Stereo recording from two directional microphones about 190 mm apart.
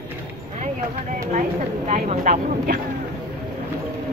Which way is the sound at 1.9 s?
35° right (ahead or behind).